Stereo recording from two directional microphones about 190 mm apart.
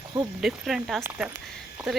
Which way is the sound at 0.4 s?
Centre (ahead or behind).